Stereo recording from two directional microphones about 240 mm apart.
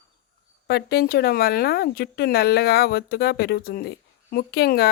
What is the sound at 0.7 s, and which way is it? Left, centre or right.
Speech, left.